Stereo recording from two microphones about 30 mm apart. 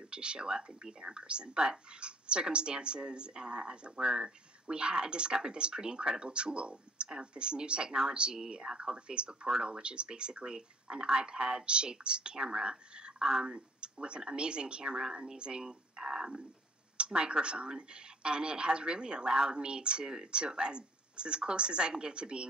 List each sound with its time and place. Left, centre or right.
0.1 s speech: right
13.2 s speech: centre
13.5 s speech: right
15.6 s speech: centre
16.9 s speech: right